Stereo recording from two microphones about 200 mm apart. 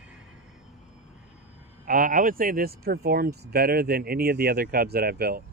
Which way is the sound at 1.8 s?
45° right (ahead or behind).